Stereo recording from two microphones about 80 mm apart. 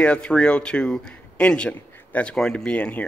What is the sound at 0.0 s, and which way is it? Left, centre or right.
Speech, centre.